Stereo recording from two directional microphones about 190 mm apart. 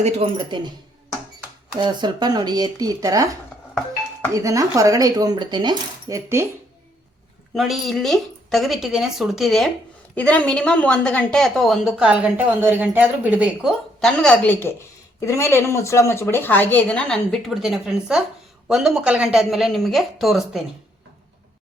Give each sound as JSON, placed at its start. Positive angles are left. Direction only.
{"t": 0.3, "sound": "speech", "side_deg": -25}
{"t": 1.7, "sound": "speech", "side_deg": -25}
{"t": 4.3, "sound": "coin", "side_deg": -15}
{"t": 7.5, "sound": "a woman's voice", "side_deg": 0}